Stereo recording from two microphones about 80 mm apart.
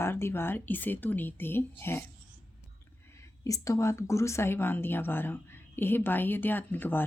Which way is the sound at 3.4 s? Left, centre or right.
Left.